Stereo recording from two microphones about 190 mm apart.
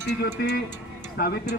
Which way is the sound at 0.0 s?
65° left (ahead or behind).